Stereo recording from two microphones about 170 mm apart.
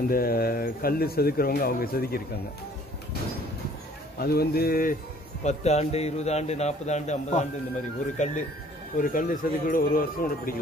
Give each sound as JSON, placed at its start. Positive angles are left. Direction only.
{"t": 0.1, "sound": "speech", "side_deg": 60}
{"t": 4.2, "sound": "speech", "side_deg": 65}
{"t": 5.4, "sound": "a man's voice", "side_deg": 40}